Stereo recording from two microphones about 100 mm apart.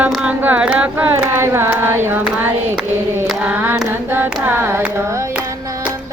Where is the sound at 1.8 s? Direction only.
20° right (ahead or behind).